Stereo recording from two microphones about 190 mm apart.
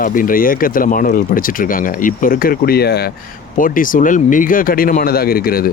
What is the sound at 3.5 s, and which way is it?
Speech, 45° left (ahead or behind).